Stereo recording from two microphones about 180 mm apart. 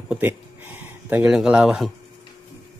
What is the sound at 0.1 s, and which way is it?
Speech, 10° right (ahead or behind).